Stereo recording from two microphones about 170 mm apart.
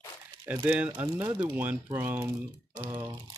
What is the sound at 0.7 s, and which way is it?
Speech, 10° right (ahead or behind).